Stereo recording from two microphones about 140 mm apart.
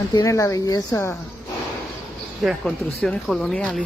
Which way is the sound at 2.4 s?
5° left (ahead or behind).